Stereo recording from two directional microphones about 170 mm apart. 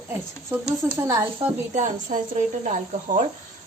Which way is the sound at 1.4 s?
45° right (ahead or behind).